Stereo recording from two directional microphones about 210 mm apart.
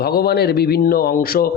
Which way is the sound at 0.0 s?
45° left (ahead or behind).